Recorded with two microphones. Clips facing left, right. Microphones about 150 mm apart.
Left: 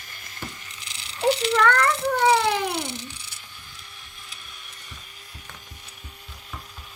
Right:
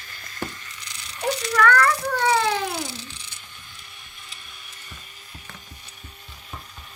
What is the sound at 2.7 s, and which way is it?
Babbling, 20° left (ahead or behind).